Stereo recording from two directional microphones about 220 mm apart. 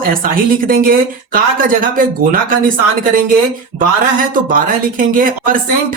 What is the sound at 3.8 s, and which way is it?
Speech, 40° right (ahead or behind).